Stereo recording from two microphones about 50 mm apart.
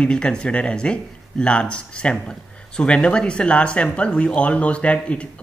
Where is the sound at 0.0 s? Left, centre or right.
Centre.